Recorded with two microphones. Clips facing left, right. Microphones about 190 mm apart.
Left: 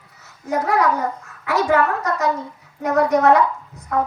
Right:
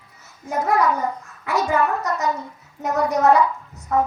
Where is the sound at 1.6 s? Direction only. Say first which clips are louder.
Left 3 dB; 65° left (ahead or behind).